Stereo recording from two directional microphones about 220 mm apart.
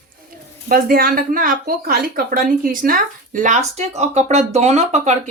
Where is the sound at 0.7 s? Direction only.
40° right (ahead or behind).